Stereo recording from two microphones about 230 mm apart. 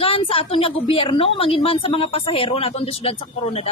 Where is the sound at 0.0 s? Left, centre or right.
Left.